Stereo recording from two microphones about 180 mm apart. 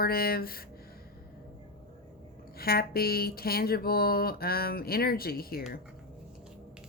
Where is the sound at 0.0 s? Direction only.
55° left (ahead or behind).